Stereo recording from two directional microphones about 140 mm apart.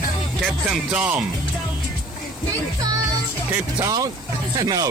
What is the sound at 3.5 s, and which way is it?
Speech, 20° right (ahead or behind).